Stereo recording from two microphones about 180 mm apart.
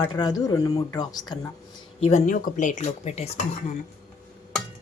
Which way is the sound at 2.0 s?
45° left (ahead or behind).